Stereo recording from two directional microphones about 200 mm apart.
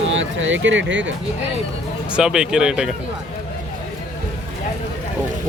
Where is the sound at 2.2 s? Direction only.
5° right (ahead or behind).